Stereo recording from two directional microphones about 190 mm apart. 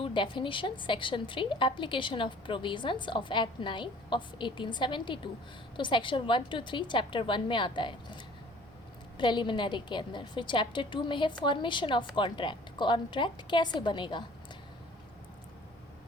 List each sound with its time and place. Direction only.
0.0 s a woman's voice: 25° left (ahead or behind)